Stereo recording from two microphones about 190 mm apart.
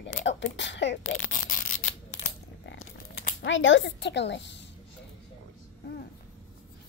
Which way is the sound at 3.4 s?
75° left (ahead or behind).